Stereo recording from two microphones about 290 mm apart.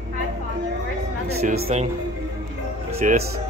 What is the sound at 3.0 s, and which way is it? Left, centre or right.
Speech, right.